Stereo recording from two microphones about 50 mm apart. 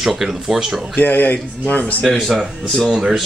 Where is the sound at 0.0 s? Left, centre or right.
Centre.